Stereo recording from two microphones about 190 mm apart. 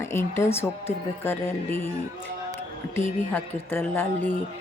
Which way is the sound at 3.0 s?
10° left (ahead or behind).